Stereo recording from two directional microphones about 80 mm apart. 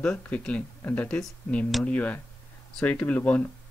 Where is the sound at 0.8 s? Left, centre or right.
Left.